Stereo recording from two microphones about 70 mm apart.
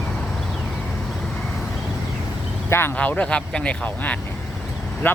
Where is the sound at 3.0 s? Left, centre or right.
Centre.